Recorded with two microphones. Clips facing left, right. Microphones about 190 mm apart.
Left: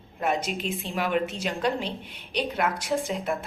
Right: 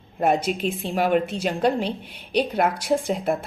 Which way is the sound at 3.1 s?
45° right (ahead or behind).